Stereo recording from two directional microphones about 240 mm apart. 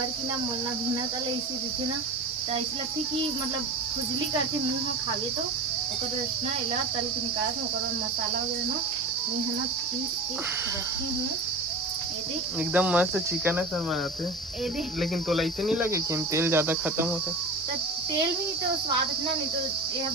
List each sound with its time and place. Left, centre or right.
12.7 s cricket: centre
15.0 s cricket: centre